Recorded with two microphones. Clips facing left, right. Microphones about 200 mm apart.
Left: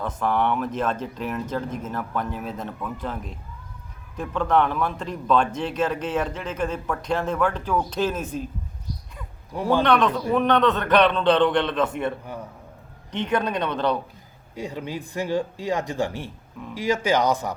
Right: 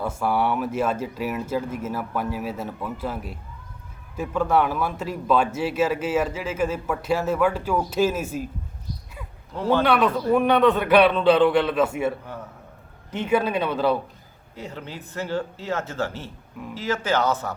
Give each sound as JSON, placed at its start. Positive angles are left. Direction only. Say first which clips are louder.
{"t": 0.0, "sound": "a man's voice", "louder": "even", "side_deg": -10}
{"t": 9.5, "sound": "speech", "louder": "even", "side_deg": 10}
{"t": 9.8, "sound": "a man's voice", "louder": "even", "side_deg": -5}
{"t": 14.5, "sound": "speech", "louder": "left 5 dB", "side_deg": 15}